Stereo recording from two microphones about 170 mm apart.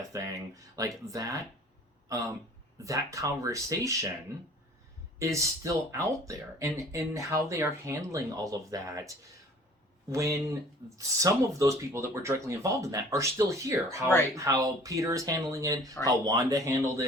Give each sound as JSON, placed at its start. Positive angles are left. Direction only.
{"t": 0.1, "sound": "speech", "side_deg": -20}
{"t": 2.8, "sound": "speech", "side_deg": -20}
{"t": 5.2, "sound": "speech", "side_deg": -20}